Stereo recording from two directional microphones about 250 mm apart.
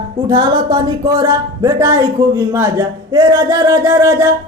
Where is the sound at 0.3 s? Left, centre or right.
Centre.